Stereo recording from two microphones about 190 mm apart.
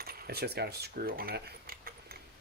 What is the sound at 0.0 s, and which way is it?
Speech, 55° right (ahead or behind).